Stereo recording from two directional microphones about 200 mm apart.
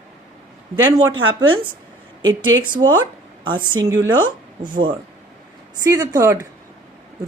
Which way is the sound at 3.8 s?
20° right (ahead or behind).